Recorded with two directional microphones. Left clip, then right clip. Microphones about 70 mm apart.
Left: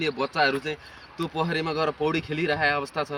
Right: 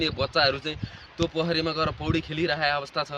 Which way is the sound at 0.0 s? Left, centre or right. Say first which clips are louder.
Even; right.